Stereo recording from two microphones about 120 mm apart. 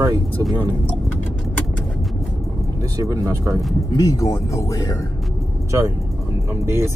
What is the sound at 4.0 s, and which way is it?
Speech, 30° left (ahead or behind).